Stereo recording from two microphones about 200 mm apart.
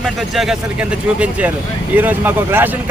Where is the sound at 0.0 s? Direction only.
Centre (ahead or behind).